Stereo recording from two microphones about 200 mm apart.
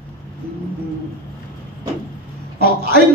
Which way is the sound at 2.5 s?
50° right (ahead or behind).